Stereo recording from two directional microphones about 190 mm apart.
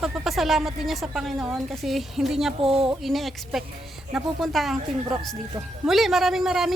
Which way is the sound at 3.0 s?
Centre (ahead or behind).